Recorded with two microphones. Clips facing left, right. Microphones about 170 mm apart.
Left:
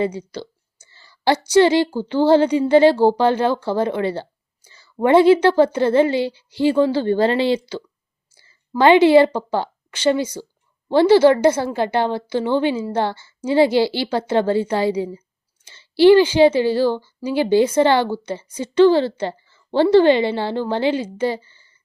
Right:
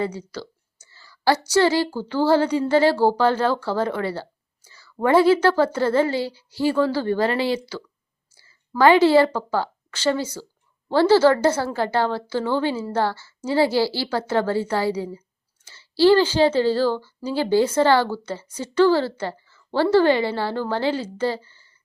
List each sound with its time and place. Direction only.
0.0 s a woman's voice: 20° left (ahead or behind)